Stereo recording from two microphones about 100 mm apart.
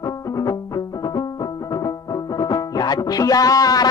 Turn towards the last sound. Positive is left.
turn(degrees=40)  # may be behind; listen again after turning